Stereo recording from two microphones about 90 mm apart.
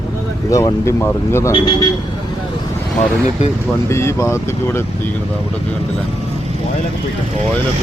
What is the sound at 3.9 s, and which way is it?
Speech, 30° left (ahead or behind).